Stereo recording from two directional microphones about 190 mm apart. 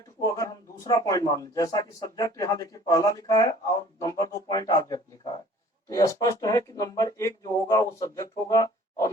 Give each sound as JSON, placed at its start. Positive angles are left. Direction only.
{"t": 0.3, "sound": "a man's voice", "side_deg": 20}